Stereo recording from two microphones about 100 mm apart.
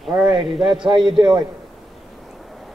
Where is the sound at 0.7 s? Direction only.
50° right (ahead or behind).